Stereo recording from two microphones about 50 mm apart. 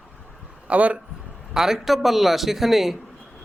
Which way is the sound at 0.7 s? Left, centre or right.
Right.